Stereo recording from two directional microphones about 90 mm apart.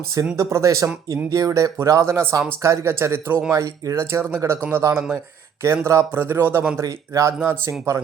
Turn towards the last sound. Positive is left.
turn(degrees=-35)  # may be behind; listen again after turning